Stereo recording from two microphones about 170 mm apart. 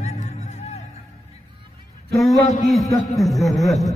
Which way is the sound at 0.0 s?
45° left (ahead or behind).